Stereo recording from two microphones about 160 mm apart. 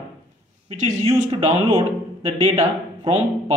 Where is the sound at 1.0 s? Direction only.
30° right (ahead or behind).